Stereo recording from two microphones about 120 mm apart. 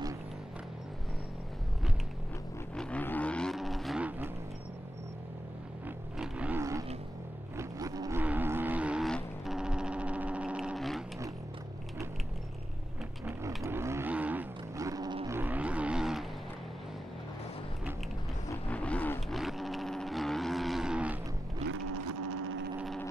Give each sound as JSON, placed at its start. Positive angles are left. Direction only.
{"t": 2.7, "sound": "vehicle", "side_deg": 10}
{"t": 6.1, "sound": "roaring cats", "side_deg": -10}
{"t": 7.5, "sound": "roaring cats", "side_deg": -30}
{"t": 8.2, "sound": "vehicle", "side_deg": -15}
{"t": 9.0, "sound": "music", "side_deg": 0}
{"t": 13.7, "sound": "vehicle", "side_deg": -20}
{"t": 14.1, "sound": "boat", "side_deg": -15}
{"t": 14.8, "sound": "roaring cats", "side_deg": -30}
{"t": 15.2, "sound": "vehicle", "side_deg": -15}
{"t": 18.7, "sound": "vehicle", "side_deg": 10}
{"t": 19.3, "sound": "vehicle", "side_deg": 0}